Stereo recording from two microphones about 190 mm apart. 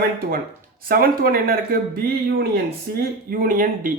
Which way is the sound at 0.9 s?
50° right (ahead or behind).